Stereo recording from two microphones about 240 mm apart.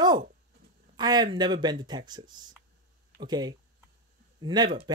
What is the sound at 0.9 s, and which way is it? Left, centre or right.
A man's voice, centre.